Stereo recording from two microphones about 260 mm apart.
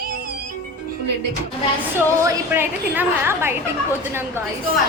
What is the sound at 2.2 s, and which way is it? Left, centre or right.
A woman's voice, centre.